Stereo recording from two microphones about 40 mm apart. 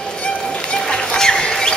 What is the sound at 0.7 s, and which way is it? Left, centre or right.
Chicken, centre.